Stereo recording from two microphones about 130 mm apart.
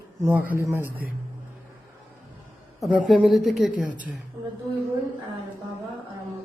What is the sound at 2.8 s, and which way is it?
A woman's voice, 5° right (ahead or behind).